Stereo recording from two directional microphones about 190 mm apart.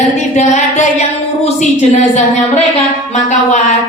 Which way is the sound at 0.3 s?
40° left (ahead or behind).